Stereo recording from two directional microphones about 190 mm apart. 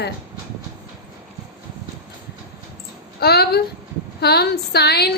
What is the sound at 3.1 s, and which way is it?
A woman's voice, 55° left (ahead or behind).